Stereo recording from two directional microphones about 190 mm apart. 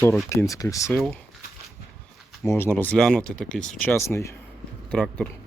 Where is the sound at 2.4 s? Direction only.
10° left (ahead or behind).